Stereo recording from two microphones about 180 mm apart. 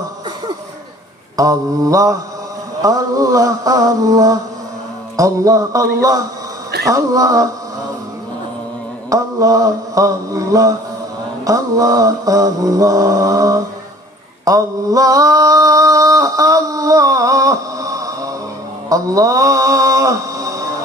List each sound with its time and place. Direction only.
1.3 s mantra: 20° right (ahead or behind)
9.1 s mantra: 20° right (ahead or behind)